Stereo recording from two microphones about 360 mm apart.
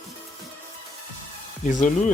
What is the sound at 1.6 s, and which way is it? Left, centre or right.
Speech, centre.